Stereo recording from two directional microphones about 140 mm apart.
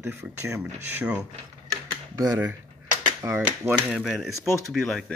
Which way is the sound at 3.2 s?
20° right (ahead or behind).